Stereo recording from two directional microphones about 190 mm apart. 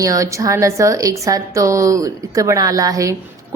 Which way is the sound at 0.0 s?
15° right (ahead or behind).